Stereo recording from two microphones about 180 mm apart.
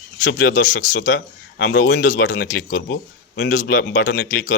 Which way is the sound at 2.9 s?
75° left (ahead or behind).